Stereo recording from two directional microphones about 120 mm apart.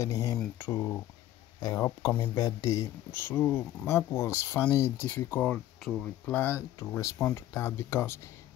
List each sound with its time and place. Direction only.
0.0 s speech: 25° left (ahead or behind)
3.2 s speech: 15° left (ahead or behind); by 6.0 s centre (ahead or behind)
6.2 s speech: 15° left (ahead or behind)
7.5 s speech: 25° left (ahead or behind)